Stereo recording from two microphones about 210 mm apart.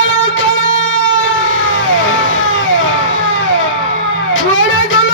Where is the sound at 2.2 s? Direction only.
65° left (ahead or behind).